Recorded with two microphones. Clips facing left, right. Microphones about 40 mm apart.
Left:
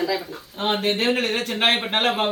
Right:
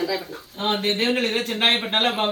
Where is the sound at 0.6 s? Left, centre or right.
Centre.